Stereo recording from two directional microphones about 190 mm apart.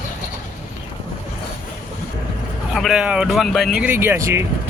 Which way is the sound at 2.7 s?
Centre (ahead or behind).